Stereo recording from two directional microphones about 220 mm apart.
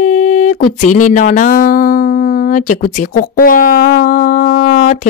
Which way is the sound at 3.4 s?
40° left (ahead or behind).